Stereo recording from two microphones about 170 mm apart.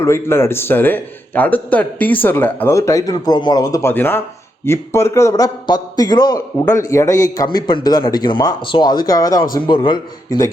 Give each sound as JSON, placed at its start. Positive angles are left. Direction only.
{"t": 0.0, "sound": "a man's voice", "side_deg": 15}